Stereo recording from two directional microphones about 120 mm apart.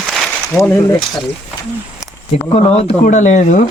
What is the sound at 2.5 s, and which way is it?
Speech, 55° left (ahead or behind).